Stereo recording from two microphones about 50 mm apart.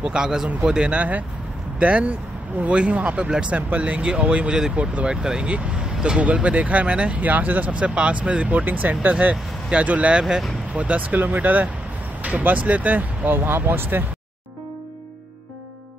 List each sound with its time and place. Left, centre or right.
0.0 s speech: centre
5.1 s speech: centre; by 7.7 s right
7.8 s speech: right
9.1 s speech: right